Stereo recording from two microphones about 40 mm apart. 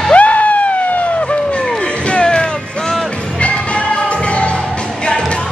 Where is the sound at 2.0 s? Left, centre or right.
Left.